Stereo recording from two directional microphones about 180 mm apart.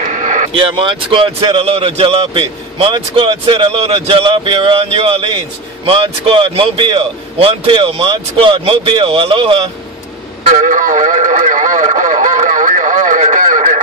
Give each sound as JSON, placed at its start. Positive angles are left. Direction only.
{"t": 0.0, "sound": "a sound", "side_deg": -45}
{"t": 0.6, "sound": "speech", "side_deg": -30}
{"t": 10.5, "sound": "radio", "side_deg": -45}